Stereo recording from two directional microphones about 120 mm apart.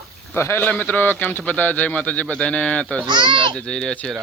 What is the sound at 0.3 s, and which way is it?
A man's voice, 20° left (ahead or behind).